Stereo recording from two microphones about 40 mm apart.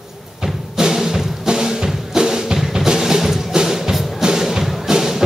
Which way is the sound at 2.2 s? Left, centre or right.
Centre.